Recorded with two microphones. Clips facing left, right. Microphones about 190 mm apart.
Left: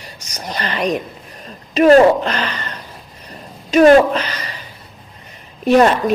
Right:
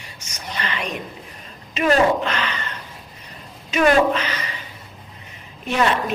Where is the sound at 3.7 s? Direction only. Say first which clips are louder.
Left 7 dB; 40° left (ahead or behind).